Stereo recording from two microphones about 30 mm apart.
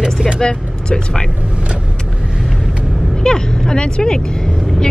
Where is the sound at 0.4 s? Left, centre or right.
Left.